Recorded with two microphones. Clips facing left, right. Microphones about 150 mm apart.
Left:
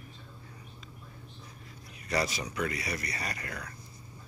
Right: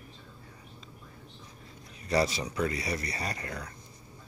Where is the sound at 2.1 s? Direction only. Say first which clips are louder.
Right 4 dB; 30° right (ahead or behind).